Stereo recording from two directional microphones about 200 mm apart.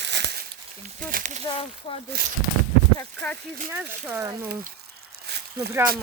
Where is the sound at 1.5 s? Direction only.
25° left (ahead or behind).